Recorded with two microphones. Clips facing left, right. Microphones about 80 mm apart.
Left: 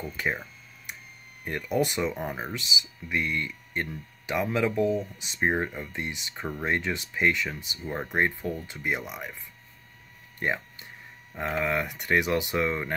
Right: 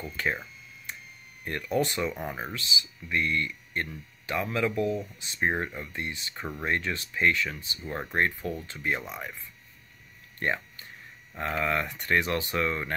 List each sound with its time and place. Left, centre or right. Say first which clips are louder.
0.0 s speech: even; centre
1.4 s speech: left 1 dB; centre
7.8 s speech: left 1 dB; centre
10.4 s a sound: even; centre
11.5 s speech: left 1 dB; centre